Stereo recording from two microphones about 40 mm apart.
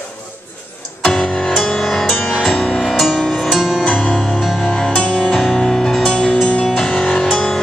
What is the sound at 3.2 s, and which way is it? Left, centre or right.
Music, centre.